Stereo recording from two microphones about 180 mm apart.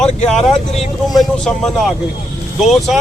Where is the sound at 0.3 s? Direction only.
Centre (ahead or behind).